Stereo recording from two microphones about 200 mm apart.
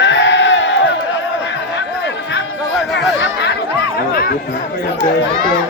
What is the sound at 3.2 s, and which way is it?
Chatter, 60° left (ahead or behind).